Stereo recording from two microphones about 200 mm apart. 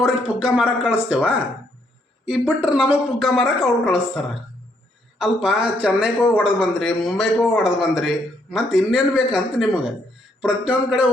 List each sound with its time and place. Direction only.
0.0 s a man's voice: 5° right (ahead or behind)
5.2 s a man's voice: 5° right (ahead or behind)